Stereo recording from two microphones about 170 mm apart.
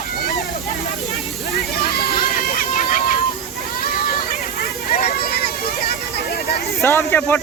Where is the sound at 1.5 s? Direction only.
65° left (ahead or behind).